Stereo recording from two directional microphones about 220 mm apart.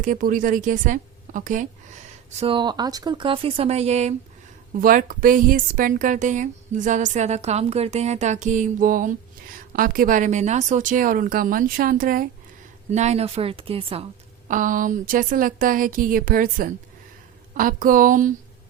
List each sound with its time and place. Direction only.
0.0 s a woman's voice: 35° right (ahead or behind)
2.4 s a woman's voice: 20° right (ahead or behind)
14.4 s a woman's voice: 35° right (ahead or behind)